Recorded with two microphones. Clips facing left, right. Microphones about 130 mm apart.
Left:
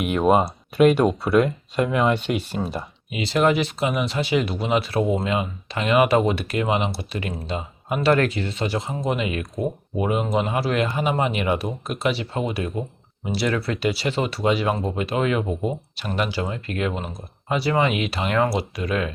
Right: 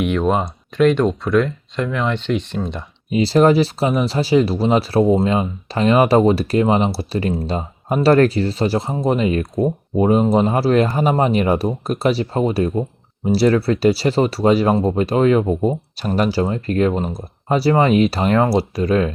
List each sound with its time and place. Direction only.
0.0 s speech: 5° left (ahead or behind)
3.1 s speech: 35° right (ahead or behind)